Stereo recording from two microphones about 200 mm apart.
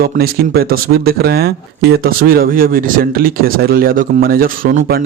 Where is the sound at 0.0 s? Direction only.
50° right (ahead or behind).